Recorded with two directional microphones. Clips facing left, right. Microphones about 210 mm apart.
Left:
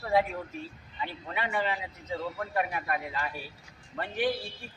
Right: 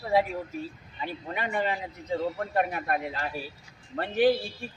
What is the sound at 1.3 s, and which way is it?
A man's voice, 45° right (ahead or behind).